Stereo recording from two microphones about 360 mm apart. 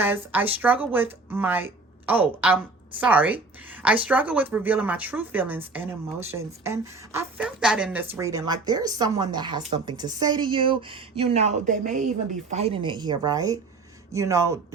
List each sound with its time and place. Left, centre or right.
0.0 s a woman's voice: centre